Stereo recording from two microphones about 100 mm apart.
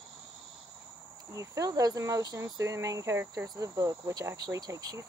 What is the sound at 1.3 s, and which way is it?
Speech, 35° right (ahead or behind).